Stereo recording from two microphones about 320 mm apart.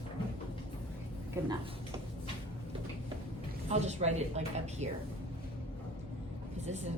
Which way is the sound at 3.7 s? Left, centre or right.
Centre.